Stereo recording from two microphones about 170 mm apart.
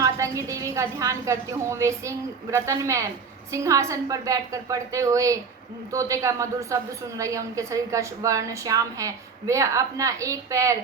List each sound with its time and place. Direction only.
0.0 s a woman's voice: 20° right (ahead or behind)